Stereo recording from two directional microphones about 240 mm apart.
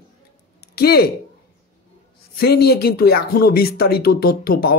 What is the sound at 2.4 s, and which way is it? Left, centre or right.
Speech, left.